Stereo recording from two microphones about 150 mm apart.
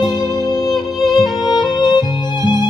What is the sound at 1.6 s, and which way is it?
Music, 30° left (ahead or behind).